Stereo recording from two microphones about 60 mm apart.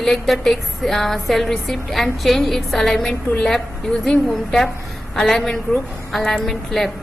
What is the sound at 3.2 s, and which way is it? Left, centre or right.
Speech, centre.